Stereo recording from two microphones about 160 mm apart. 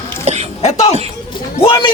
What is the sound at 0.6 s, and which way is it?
Speech, 45° left (ahead or behind).